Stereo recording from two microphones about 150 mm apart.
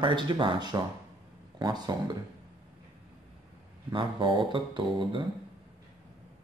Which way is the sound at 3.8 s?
35° right (ahead or behind).